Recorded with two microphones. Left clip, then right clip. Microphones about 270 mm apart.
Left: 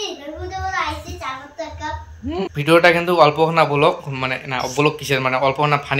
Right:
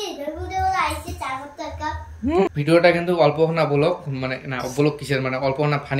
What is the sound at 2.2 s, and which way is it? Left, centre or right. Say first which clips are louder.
A man's voice: left 1 dB; centre.